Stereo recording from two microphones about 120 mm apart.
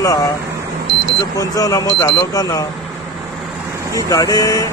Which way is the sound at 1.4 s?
30° left (ahead or behind).